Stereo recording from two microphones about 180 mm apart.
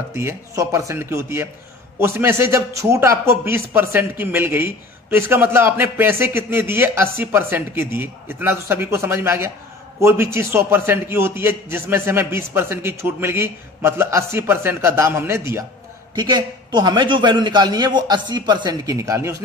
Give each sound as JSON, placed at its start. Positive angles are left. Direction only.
{"t": 0.1, "sound": "a man's voice", "side_deg": -15}
{"t": 16.2, "sound": "a man's voice", "side_deg": -25}